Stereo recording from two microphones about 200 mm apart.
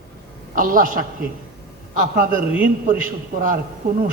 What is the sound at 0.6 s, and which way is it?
A man's voice, 40° right (ahead or behind).